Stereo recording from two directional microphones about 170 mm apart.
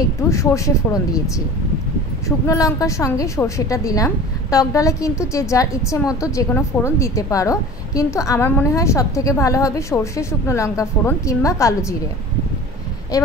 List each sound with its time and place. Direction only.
0.3 s a woman's voice: 20° left (ahead or behind)
13.1 s a woman's voice: 20° left (ahead or behind)